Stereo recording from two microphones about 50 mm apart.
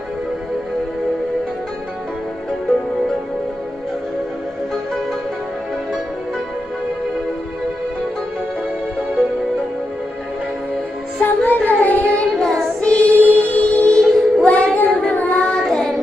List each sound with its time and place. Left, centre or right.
11.1 s child singing: left
12.4 s child singing: centre
12.8 s child singing: left
13.2 s music: left
15.3 s child singing: centre